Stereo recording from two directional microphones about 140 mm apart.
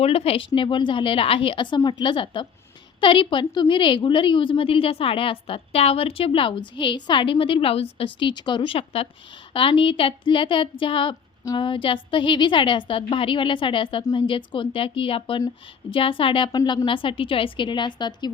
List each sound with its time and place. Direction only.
0.0 s a woman's voice: 45° left (ahead or behind)